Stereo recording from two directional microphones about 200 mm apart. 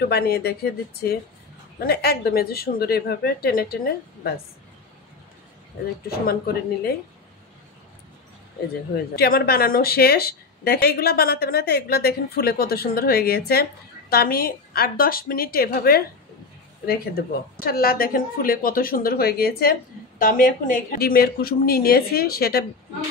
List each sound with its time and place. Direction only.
0.1 s speech: 55° left (ahead or behind)
1.8 s speech: 50° left (ahead or behind)
6.1 s speech: 50° left (ahead or behind)
9.1 s speech: 50° left (ahead or behind)